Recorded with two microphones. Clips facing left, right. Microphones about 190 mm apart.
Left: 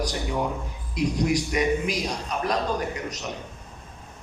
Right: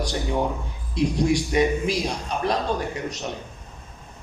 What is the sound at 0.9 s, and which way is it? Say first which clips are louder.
A man's voice: right 2 dB; 30° right (ahead or behind).